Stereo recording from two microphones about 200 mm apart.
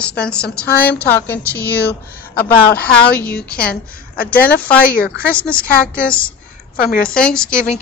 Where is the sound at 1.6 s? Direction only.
50° left (ahead or behind).